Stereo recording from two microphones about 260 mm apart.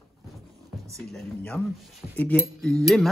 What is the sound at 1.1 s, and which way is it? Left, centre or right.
Speech, centre.